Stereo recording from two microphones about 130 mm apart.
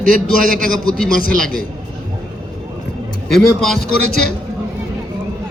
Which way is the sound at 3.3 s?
Centre (ahead or behind).